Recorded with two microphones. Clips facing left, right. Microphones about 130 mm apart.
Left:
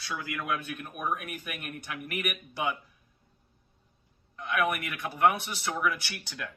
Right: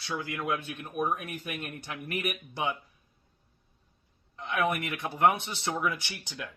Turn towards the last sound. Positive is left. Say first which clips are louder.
# left 1 dB
turn(degrees=-20)  # may be behind; listen again after turning